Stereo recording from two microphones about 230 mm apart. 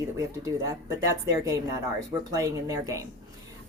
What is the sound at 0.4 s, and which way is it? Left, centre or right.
A woman's voice, centre.